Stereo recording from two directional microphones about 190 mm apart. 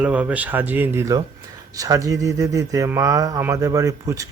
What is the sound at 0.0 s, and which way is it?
Speech, 5° right (ahead or behind).